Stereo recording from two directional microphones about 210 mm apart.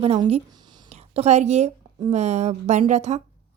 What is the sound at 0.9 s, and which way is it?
A woman's voice, 30° right (ahead or behind).